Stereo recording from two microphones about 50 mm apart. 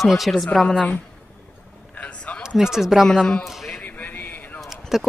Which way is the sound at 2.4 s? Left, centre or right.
Centre.